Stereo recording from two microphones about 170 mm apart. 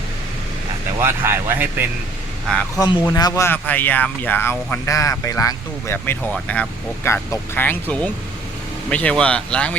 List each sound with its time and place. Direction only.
1.0 s speech: 15° right (ahead or behind)
2.7 s speech: 20° left (ahead or behind)